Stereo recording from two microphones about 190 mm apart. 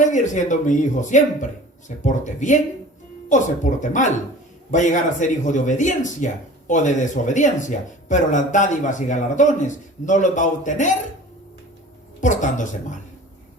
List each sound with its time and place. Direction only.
0.0 s speech: 40° left (ahead or behind)
12.2 s speech: 40° left (ahead or behind)